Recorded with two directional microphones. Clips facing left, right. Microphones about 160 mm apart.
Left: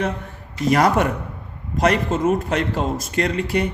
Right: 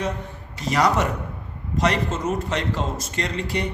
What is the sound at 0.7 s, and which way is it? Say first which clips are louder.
A man's voice: left 3 dB; 55° left (ahead or behind).